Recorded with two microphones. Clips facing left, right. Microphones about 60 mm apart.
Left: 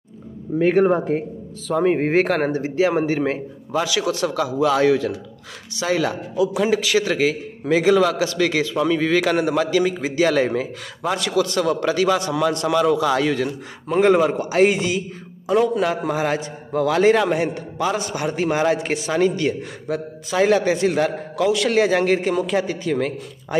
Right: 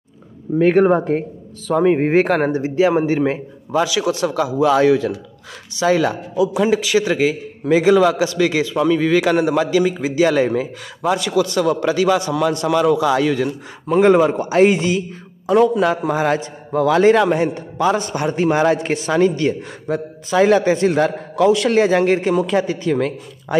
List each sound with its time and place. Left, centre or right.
0.7 s a man's voice: right
1.8 s a man's voice: centre
3.7 s a man's voice: right
6.5 s a man's voice: centre
8.8 s a man's voice: centre
12.7 s a man's voice: centre
14.0 s a man's voice: right
15.4 s a man's voice: right